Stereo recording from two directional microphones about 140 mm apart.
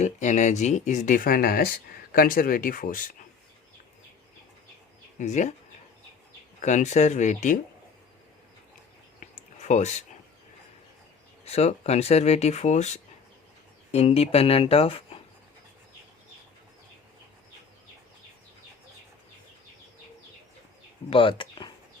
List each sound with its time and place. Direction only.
0.0 s speech: 60° left (ahead or behind); by 3.0 s 80° left
5.2 s speech: 55° left (ahead or behind)
6.6 s speech: 60° left (ahead or behind)
9.2 s a sound: 60° left (ahead or behind)
11.4 s speech: 50° left (ahead or behind)
21.1 s speech: 40° left (ahead or behind)